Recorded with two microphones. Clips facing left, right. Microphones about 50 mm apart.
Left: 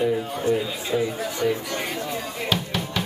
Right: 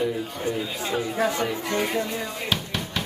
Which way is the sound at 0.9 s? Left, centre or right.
Right.